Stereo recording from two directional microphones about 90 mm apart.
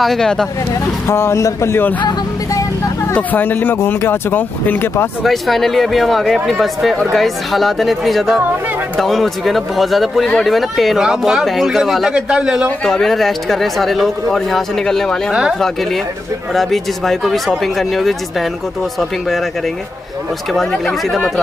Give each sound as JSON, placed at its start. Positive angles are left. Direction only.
{"t": 0.0, "sound": "speech", "side_deg": 5}
{"t": 1.0, "sound": "speech", "side_deg": 30}
{"t": 3.2, "sound": "speech", "side_deg": 20}
{"t": 5.2, "sound": "speech", "side_deg": 0}
{"t": 12.8, "sound": "speech", "side_deg": 5}
{"t": 20.5, "sound": "speech", "side_deg": 5}